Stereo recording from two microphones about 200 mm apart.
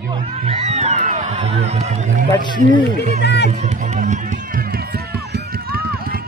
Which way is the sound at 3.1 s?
55° left (ahead or behind).